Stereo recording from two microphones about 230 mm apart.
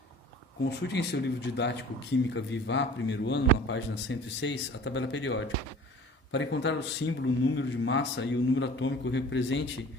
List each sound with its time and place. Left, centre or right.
0.8 s speech: left